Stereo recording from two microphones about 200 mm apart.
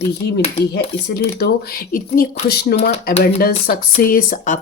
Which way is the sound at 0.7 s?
55° left (ahead or behind).